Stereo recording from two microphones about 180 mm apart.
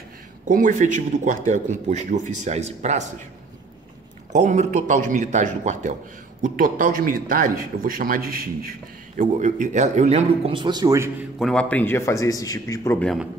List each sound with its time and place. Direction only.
0.5 s speech: 45° right (ahead or behind)
4.3 s speech: 40° right (ahead or behind)
9.2 s a man's voice: 40° right (ahead or behind); by 11.2 s 15° right (ahead or behind)
11.3 s a man's voice: 5° left (ahead or behind)